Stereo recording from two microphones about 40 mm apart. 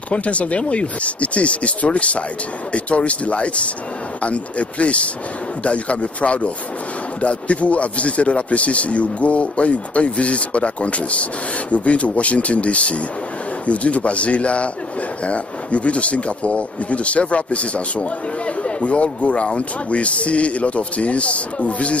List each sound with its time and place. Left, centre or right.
0.1 s speech: left